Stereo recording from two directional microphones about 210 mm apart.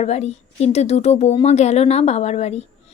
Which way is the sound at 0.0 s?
30° left (ahead or behind).